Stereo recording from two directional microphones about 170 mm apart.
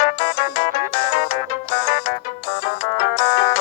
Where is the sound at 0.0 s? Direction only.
35° left (ahead or behind).